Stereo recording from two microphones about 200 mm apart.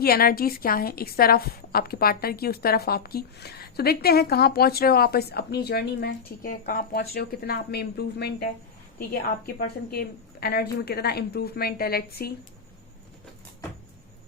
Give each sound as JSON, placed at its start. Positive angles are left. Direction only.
{"t": 0.0, "sound": "a woman's voice", "side_deg": 50}
{"t": 9.9, "sound": "a woman's voice", "side_deg": 50}